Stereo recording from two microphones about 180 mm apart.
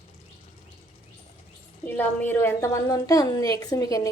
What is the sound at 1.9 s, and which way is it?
A woman's voice, 10° left (ahead or behind).